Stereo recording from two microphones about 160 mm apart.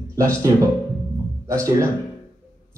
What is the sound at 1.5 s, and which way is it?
Speech, 20° right (ahead or behind).